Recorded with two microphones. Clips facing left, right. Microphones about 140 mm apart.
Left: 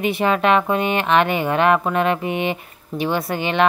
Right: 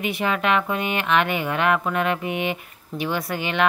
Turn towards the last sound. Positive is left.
turn(degrees=30)  # may be behind; listen again after turning